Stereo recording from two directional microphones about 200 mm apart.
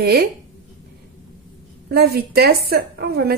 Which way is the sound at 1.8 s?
50° right (ahead or behind).